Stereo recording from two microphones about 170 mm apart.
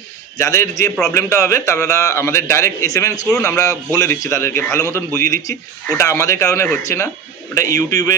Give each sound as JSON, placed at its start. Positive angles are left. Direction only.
{"t": 0.4, "sound": "a man's voice", "side_deg": 15}